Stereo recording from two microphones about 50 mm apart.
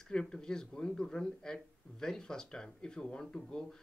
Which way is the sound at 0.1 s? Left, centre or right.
Centre.